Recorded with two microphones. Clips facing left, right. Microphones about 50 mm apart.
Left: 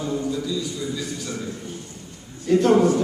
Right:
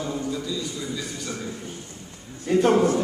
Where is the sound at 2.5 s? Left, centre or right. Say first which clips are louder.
Left 2 dB; centre.